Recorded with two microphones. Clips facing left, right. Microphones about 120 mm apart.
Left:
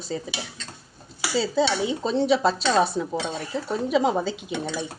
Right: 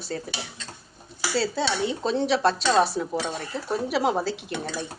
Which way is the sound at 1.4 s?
Centre (ahead or behind).